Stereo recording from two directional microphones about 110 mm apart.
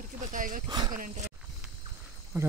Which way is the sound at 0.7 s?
35° right (ahead or behind).